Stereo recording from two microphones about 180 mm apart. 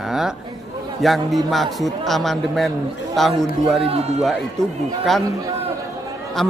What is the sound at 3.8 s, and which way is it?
Speech, 35° right (ahead or behind).